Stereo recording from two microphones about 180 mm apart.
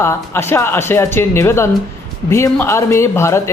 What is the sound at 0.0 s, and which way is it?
Speech, 15° left (ahead or behind).